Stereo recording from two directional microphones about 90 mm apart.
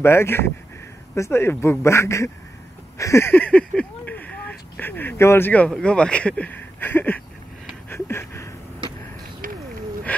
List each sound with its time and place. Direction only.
0.0 s speech: 30° left (ahead or behind)
5.5 s speech: 10° left (ahead or behind)
7.9 s a sound: 30° left (ahead or behind)